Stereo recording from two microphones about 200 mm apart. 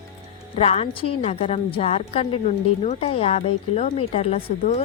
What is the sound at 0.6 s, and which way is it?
A woman's voice, 30° left (ahead or behind).